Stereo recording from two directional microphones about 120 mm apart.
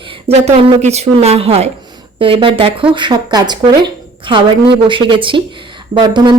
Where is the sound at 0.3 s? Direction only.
65° right (ahead or behind).